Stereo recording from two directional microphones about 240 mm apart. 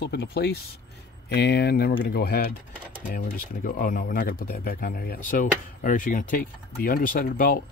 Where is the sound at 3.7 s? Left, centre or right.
Left.